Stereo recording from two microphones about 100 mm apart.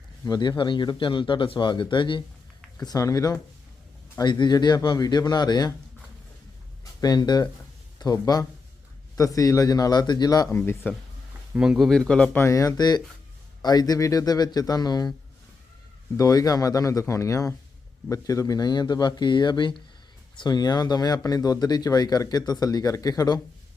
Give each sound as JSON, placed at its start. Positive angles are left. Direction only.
{"t": 0.3, "sound": "speech", "side_deg": 45}
{"t": 2.8, "sound": "speech", "side_deg": 35}
{"t": 4.2, "sound": "speech", "side_deg": 45}
{"t": 7.0, "sound": "speech", "side_deg": 45}
{"t": 10.5, "sound": "a man's voice", "side_deg": 15}
{"t": 11.5, "sound": "speech", "side_deg": -10}
{"t": 11.8, "sound": "a man's voice", "side_deg": 5}
{"t": 12.4, "sound": "speech", "side_deg": 35}
{"t": 16.1, "sound": "speech", "side_deg": 35}